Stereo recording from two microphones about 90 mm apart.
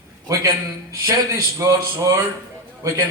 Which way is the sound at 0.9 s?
30° right (ahead or behind).